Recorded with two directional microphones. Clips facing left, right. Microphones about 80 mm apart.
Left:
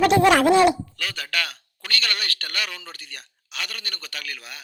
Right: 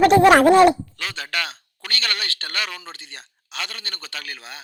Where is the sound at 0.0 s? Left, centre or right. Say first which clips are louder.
Right 4 dB; right.